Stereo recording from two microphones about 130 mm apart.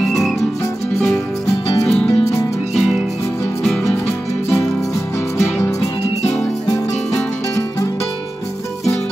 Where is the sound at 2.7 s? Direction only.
Centre (ahead or behind).